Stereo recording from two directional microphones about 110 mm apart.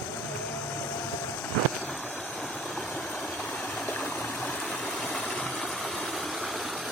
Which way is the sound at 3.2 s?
5° left (ahead or behind).